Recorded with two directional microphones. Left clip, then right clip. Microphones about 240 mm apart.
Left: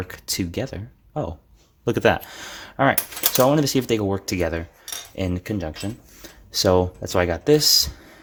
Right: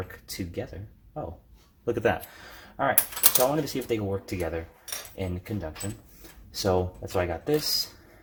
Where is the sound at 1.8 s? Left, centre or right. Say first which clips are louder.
Left 7 dB; left.